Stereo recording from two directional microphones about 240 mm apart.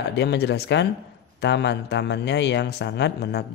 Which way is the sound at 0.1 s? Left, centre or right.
Left.